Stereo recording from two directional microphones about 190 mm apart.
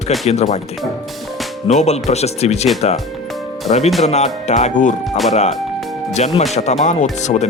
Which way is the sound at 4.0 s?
35° left (ahead or behind).